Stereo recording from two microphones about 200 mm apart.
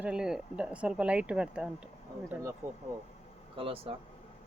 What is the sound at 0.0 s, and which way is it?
Speech, 5° right (ahead or behind).